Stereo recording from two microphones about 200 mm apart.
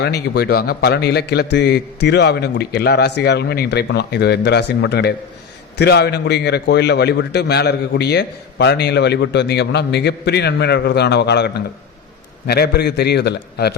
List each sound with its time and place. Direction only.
0.0 s a man's voice: 55° left (ahead or behind)